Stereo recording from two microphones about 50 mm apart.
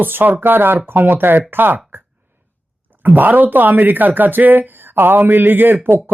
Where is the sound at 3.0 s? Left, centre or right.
Right.